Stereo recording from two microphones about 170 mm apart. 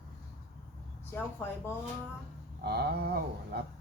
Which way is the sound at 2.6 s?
70° right (ahead or behind).